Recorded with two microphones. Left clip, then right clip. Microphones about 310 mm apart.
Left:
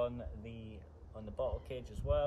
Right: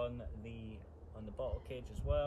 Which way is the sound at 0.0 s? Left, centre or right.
Centre.